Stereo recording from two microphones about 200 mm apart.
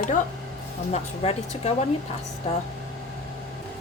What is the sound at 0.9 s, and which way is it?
Speech, 35° left (ahead or behind).